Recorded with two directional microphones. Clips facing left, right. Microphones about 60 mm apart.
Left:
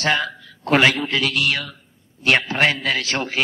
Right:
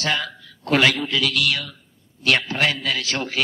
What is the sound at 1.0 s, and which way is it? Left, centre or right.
A man's voice, left.